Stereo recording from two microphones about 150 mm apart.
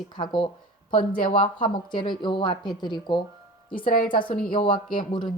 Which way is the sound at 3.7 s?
70° left (ahead or behind).